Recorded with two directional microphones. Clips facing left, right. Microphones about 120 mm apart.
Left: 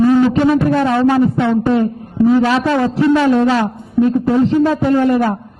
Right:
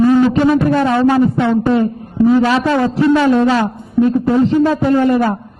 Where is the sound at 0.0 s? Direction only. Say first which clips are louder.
Even; 20° right (ahead or behind).